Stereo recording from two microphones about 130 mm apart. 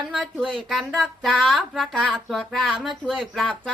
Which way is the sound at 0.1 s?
Centre (ahead or behind).